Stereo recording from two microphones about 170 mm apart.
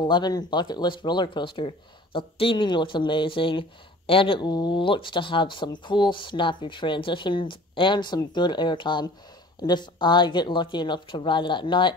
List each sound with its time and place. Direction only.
0.0 s speech: 25° left (ahead or behind)